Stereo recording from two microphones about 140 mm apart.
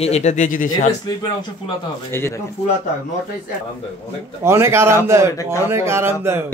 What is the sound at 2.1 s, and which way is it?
Speech, 20° left (ahead or behind).